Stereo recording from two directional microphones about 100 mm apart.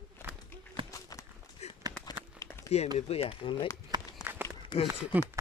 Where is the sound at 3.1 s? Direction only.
70° left (ahead or behind).